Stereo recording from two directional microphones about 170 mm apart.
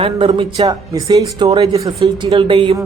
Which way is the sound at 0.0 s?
35° right (ahead or behind).